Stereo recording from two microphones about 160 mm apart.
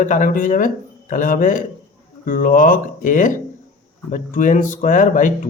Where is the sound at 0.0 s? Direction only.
50° left (ahead or behind).